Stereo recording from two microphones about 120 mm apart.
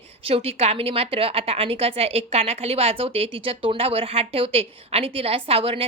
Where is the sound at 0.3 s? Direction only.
55° right (ahead or behind).